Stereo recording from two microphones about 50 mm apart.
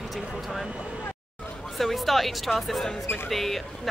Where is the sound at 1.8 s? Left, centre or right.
Centre.